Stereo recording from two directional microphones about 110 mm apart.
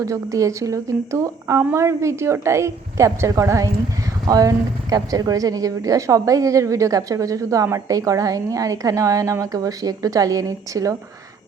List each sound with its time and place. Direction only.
0.0 s a woman's voice: 30° right (ahead or behind)